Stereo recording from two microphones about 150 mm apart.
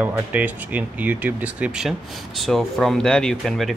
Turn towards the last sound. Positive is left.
turn(degrees=0)  # may be behind; listen again after turning